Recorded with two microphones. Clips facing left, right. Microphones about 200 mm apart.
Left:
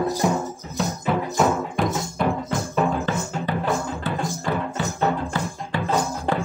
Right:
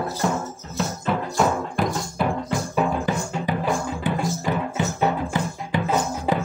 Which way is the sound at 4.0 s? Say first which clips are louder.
Right 2 dB; 15° right (ahead or behind).